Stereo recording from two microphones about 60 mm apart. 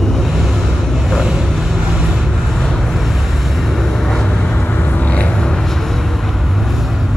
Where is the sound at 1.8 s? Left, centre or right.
Centre.